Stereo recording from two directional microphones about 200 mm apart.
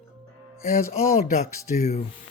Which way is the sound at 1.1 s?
40° left (ahead or behind).